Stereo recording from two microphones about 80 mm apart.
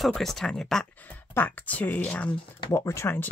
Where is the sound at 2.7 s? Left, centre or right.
Left.